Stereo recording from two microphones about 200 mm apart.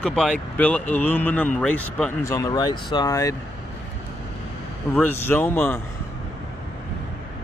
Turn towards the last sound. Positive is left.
turn(degrees=10)  # may be behind; listen again after turning